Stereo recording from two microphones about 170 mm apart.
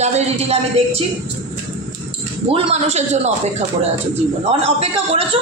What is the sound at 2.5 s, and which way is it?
Speech, 35° right (ahead or behind).